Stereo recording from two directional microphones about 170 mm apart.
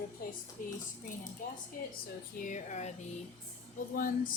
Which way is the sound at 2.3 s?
45° left (ahead or behind).